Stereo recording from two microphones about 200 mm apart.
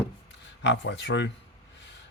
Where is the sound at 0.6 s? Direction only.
60° left (ahead or behind).